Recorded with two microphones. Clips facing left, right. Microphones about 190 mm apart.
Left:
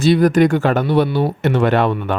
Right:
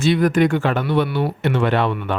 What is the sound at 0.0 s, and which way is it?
Speech, 35° left (ahead or behind).